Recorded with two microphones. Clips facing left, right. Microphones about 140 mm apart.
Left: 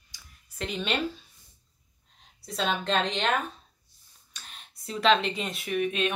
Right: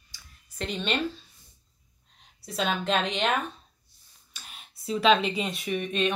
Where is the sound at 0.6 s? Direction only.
5° left (ahead or behind).